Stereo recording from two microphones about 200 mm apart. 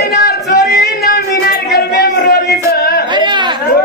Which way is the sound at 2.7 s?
50° left (ahead or behind).